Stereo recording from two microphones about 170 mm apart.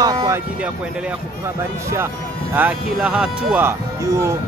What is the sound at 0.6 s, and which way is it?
Speech, 5° right (ahead or behind).